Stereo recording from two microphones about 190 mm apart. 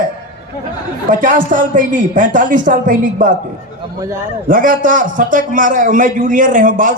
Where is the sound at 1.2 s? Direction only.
45° right (ahead or behind).